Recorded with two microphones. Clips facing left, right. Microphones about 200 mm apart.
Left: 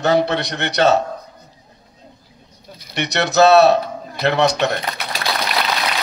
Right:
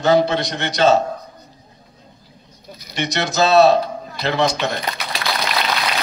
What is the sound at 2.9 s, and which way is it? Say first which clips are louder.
A man's voice: left 4 dB; 65° left (ahead or behind).